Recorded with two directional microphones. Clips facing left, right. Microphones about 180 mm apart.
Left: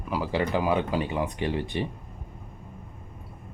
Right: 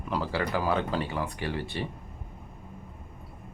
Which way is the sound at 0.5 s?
15° left (ahead or behind).